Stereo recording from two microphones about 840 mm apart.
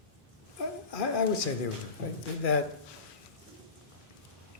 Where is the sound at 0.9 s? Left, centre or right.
Left.